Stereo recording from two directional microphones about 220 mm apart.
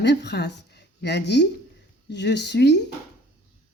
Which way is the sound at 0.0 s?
50° left (ahead or behind).